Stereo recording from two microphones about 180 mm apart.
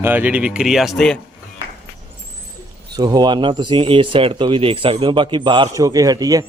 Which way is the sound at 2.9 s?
20° right (ahead or behind).